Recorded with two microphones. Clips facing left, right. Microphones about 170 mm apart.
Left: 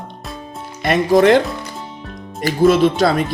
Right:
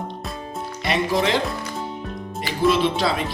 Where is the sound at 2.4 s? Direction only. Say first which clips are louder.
Left 7 dB; 45° left (ahead or behind).